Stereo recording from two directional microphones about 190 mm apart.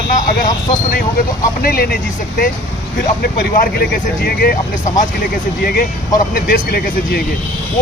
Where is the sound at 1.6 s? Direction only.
50° left (ahead or behind).